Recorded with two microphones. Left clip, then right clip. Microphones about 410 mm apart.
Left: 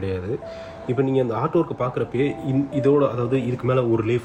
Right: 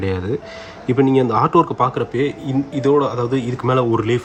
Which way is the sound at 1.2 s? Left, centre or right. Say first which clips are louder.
Right 7 dB; right.